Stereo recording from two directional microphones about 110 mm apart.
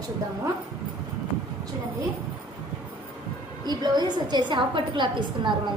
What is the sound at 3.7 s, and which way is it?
A woman's voice, 40° right (ahead or behind).